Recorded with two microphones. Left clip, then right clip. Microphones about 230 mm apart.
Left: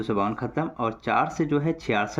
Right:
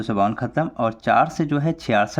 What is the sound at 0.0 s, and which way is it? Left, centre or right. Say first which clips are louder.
Speech: right 5 dB; right.